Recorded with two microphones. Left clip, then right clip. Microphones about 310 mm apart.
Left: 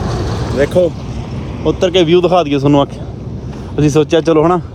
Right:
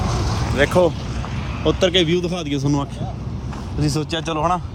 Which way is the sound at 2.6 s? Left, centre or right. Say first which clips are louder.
Left 12 dB; left.